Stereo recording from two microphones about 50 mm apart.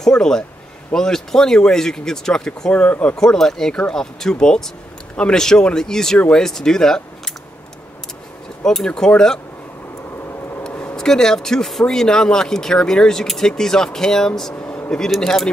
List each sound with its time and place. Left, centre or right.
0.0 s speech: centre
2.7 s speech: left
3.2 s speech: centre
8.6 s speech: centre
10.7 s a sound: left
11.0 s speech: centre